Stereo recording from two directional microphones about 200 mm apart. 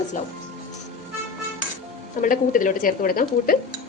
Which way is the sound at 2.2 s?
40° left (ahead or behind).